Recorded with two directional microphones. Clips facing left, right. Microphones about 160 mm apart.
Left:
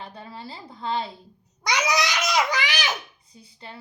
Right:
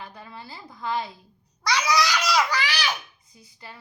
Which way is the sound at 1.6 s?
15° left (ahead or behind).